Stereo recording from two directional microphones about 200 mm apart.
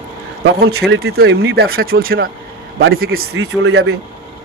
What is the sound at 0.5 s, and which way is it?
Speech, 55° right (ahead or behind).